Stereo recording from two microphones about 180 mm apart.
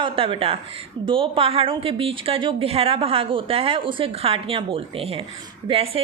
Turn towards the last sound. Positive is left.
turn(degrees=-30)  # may be behind; listen again after turning